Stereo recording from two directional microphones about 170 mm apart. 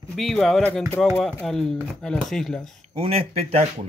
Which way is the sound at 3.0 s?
35° right (ahead or behind).